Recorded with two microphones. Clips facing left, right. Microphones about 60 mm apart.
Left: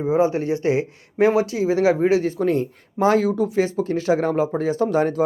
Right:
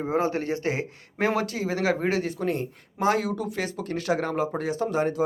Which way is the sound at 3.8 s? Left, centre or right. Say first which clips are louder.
Left 8 dB; right.